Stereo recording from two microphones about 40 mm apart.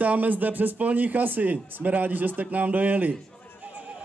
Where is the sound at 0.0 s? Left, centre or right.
Right.